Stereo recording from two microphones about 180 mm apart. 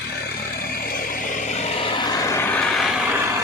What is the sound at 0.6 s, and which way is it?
Vehicle, 55° left (ahead or behind).